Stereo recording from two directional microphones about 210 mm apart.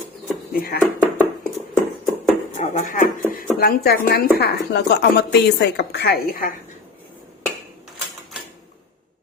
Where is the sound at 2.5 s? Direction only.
35° left (ahead or behind).